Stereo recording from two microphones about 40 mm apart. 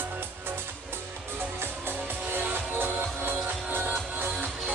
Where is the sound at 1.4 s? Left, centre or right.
Right.